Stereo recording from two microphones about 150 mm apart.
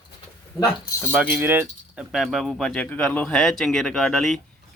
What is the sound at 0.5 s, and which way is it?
Speech, 30° left (ahead or behind).